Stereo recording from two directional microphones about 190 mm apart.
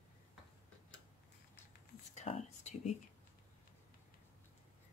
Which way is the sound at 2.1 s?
35° left (ahead or behind).